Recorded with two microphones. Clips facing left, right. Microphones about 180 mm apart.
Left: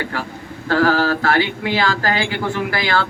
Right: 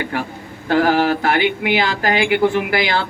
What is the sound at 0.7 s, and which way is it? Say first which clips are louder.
Speech: right 1 dB; 20° right (ahead or behind).